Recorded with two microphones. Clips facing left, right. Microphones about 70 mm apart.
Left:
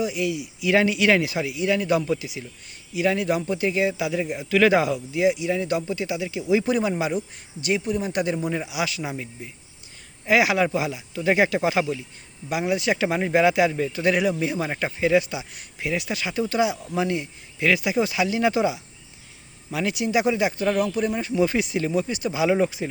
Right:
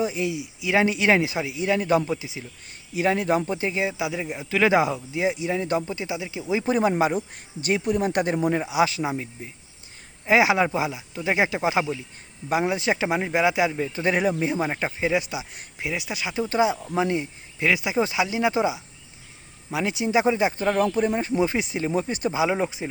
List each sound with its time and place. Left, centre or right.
0.0 s speech: right
2.9 s speech: right
10.2 s speech: right
13.9 s speech: right
22.4 s speech: centre